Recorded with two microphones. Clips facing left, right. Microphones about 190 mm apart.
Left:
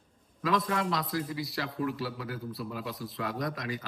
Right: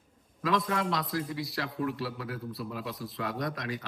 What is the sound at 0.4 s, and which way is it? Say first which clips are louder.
A man's voice: even; centre (ahead or behind).